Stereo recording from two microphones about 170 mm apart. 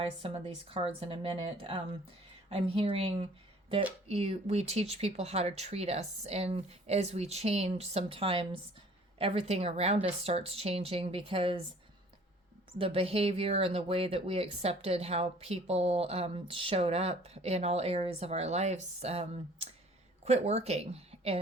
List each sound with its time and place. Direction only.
0.0 s speech: 35° right (ahead or behind)
12.8 s a woman's voice: 35° right (ahead or behind)